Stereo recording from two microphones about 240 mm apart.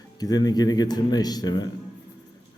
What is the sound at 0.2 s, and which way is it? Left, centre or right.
A man's voice, centre.